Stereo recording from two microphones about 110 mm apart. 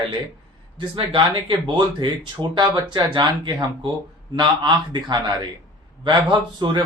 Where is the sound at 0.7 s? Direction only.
55° right (ahead or behind).